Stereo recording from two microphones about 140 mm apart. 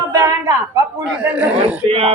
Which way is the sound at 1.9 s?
45° right (ahead or behind).